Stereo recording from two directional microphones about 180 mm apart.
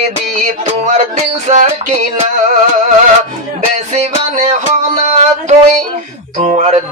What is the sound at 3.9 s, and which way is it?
Music, 40° right (ahead or behind).